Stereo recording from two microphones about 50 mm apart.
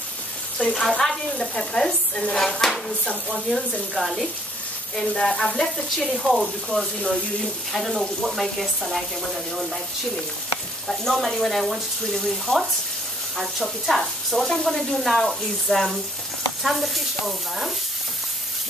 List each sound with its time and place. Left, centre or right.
0.6 s speech: centre
4.9 s speech: centre
6.7 s speech: left
7.7 s speech: centre
10.9 s speech: centre